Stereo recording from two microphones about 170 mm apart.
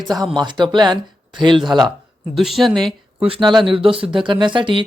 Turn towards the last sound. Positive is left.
turn(degrees=-30)  # may be behind; listen again after turning